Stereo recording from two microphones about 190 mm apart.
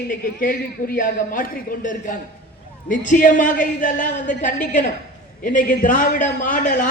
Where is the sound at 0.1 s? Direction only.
45° left (ahead or behind).